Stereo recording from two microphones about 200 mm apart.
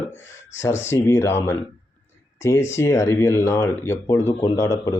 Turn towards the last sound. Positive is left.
turn(degrees=15)  # may be behind; listen again after turning